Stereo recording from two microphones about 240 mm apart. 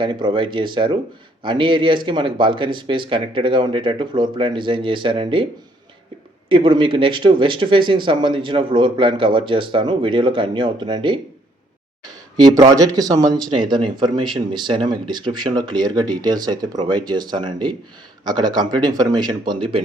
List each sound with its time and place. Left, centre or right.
0.0 s speech: centre
6.5 s speech: right
12.4 s speech: centre